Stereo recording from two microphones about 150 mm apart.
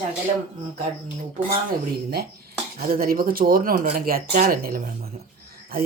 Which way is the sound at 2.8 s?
80° right.